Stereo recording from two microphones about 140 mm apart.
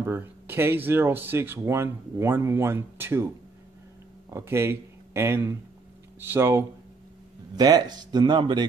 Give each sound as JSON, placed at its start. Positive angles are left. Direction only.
{"t": 0.0, "sound": "speech", "side_deg": -15}
{"t": 4.3, "sound": "a man's voice", "side_deg": -20}
{"t": 7.5, "sound": "speech", "side_deg": -30}